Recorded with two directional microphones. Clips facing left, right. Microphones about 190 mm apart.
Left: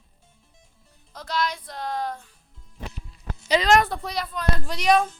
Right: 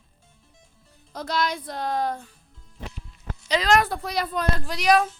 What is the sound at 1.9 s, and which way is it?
Speech, 50° right (ahead or behind).